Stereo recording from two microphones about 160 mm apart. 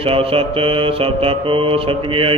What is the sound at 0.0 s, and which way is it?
Mantra, 35° right (ahead or behind).